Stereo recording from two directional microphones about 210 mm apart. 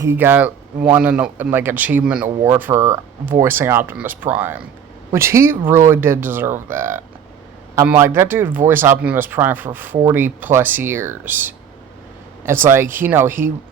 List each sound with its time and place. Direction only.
0.0 s speech: 10° right (ahead or behind)